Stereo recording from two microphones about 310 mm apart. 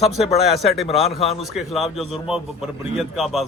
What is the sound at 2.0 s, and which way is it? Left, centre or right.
A man's voice, centre.